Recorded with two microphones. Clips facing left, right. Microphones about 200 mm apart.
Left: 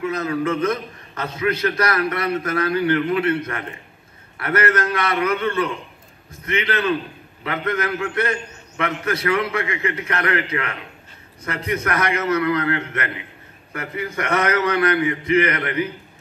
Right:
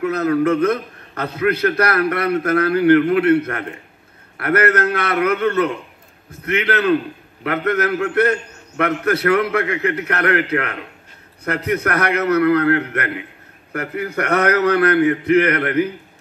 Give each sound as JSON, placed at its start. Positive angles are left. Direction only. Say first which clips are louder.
{"t": 0.0, "sound": "a man's voice", "louder": "right 5 dB", "side_deg": -65}